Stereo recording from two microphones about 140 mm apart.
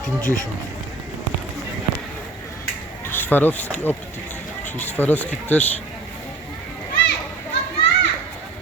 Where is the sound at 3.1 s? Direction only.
15° left (ahead or behind).